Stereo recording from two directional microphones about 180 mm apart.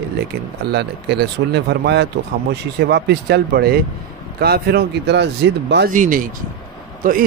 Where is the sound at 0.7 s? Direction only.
70° right (ahead or behind).